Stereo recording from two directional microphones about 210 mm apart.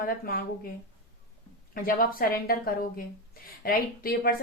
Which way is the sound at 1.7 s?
45° left (ahead or behind).